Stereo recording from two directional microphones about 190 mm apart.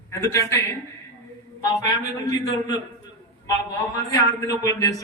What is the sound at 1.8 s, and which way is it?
Speech, 20° left (ahead or behind).